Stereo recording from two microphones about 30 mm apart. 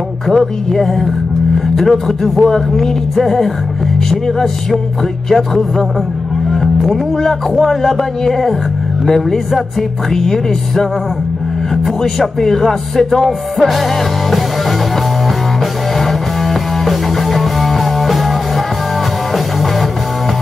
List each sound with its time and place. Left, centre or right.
0.3 s music: centre
1.9 s speech: centre
5.3 s music: centre
7.6 s speech: centre
9.8 s speech: centre
12.0 s music: centre
16.0 s music: centre